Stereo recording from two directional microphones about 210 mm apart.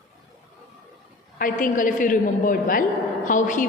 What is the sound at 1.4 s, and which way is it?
A woman's voice, 40° left (ahead or behind).